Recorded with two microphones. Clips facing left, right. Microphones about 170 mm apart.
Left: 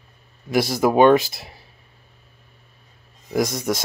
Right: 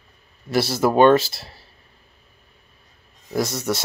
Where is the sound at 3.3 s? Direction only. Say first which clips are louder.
Left 1 dB; 15° left (ahead or behind).